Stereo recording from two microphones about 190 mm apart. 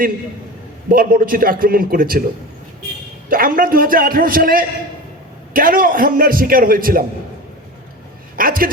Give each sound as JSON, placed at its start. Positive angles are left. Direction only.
{"t": 0.9, "sound": "a man's voice", "side_deg": -50}
{"t": 3.2, "sound": "a man's voice", "side_deg": -50}
{"t": 8.4, "sound": "a man's voice", "side_deg": -50}